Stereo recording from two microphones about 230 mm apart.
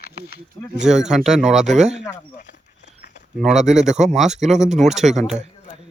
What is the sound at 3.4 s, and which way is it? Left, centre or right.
Speech, centre.